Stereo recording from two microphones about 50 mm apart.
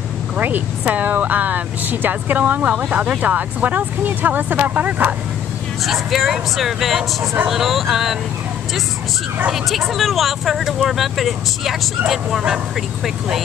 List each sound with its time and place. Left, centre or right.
0.4 s speech: right
5.9 s speech: centre
9.5 s speech: centre